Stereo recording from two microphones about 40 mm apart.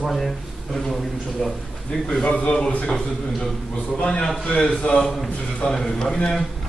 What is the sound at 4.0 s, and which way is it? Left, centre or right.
A man's voice, left.